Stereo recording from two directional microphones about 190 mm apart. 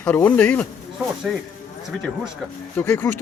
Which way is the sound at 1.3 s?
5° right (ahead or behind).